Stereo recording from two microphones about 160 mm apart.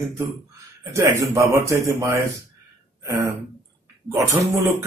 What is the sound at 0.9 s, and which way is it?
A man's voice, 20° right (ahead or behind).